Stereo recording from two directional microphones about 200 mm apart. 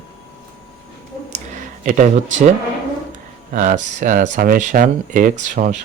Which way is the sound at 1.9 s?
40° right (ahead or behind).